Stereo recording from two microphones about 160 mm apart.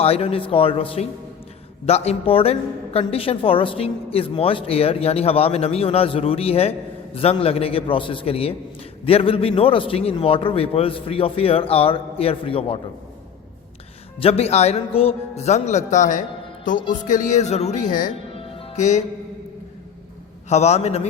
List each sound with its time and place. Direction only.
0.0 s a woman's voice: 40° left (ahead or behind)
14.2 s a woman's voice: 40° left (ahead or behind); by 18.1 s 55° left (ahead or behind)
18.3 s music: 35° left (ahead or behind)
18.8 s speech: 50° left (ahead or behind)
20.5 s speech: 45° left (ahead or behind)